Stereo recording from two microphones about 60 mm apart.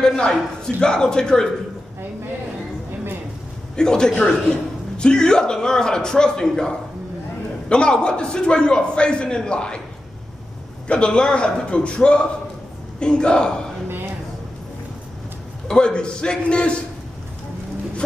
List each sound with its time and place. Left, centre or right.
0.0 s a man's voice: centre
3.7 s a man's voice: centre
7.7 s a man's voice: centre
10.9 s a man's voice: centre
15.7 s a man's voice: centre